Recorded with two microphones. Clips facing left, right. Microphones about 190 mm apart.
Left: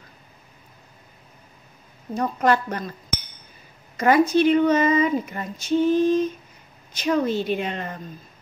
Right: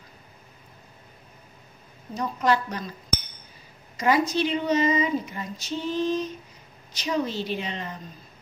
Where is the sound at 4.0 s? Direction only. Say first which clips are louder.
Left 5 dB; 55° left (ahead or behind).